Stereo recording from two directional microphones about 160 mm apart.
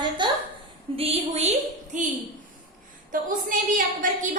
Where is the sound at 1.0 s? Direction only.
40° right (ahead or behind).